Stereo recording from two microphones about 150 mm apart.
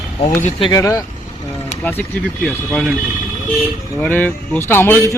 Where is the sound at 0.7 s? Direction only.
20° left (ahead or behind).